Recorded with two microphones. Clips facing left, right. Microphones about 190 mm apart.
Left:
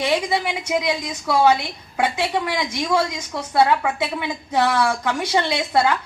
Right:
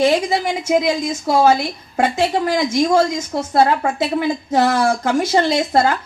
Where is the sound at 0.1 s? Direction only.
40° right (ahead or behind).